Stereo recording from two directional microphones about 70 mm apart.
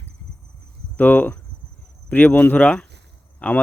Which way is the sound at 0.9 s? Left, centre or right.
Left.